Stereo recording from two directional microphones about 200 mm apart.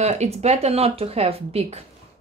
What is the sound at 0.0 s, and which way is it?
Speech, 30° right (ahead or behind).